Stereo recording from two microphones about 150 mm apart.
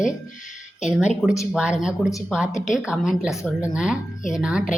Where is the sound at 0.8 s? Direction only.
5° right (ahead or behind).